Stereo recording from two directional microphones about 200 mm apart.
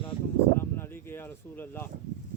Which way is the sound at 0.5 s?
10° left (ahead or behind).